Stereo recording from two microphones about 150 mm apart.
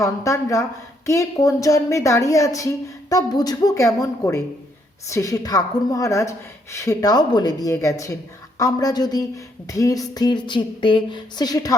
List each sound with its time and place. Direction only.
0.0 s a woman's voice: 20° left (ahead or behind)